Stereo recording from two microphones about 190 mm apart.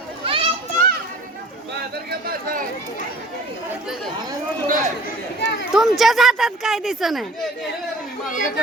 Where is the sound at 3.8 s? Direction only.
Centre (ahead or behind).